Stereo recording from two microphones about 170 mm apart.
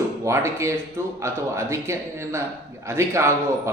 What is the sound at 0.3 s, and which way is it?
A man's voice, 15° right (ahead or behind).